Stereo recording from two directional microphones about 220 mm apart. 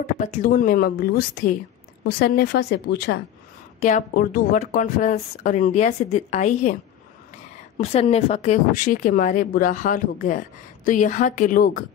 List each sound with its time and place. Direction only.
0.0 s speech: 35° left (ahead or behind)
3.8 s speech: 40° left (ahead or behind)